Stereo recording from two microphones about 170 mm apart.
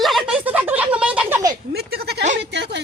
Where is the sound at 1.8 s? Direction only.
75° right (ahead or behind).